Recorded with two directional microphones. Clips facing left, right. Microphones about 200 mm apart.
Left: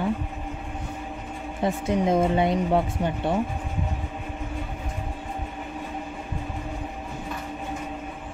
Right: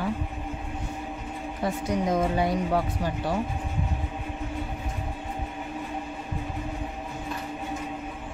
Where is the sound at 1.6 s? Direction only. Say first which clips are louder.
Left 3 dB; 25° left (ahead or behind).